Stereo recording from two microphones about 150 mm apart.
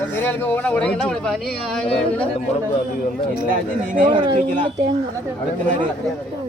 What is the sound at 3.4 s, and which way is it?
Speech, 65° right (ahead or behind).